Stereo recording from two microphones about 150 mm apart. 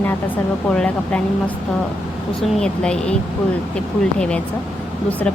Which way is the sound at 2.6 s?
5° left (ahead or behind).